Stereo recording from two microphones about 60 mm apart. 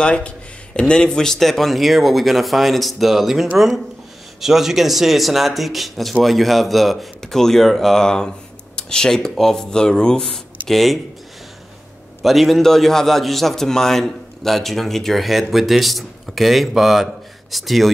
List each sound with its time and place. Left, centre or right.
0.0 s a man's voice: centre
12.2 s a man's voice: centre